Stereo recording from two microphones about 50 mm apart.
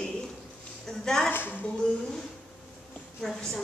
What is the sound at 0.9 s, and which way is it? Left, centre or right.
Speech, centre.